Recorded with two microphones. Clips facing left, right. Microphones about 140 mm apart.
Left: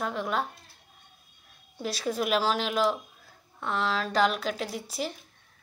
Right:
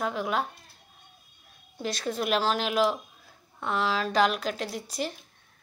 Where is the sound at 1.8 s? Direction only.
5° left (ahead or behind).